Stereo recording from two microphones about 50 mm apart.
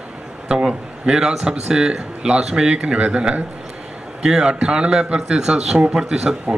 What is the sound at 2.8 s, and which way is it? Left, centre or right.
A man's voice, right.